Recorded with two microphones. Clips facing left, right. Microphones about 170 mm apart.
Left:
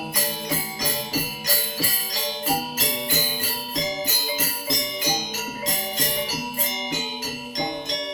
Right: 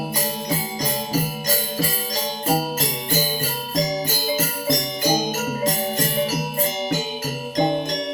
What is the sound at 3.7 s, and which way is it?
Music, 45° right (ahead or behind).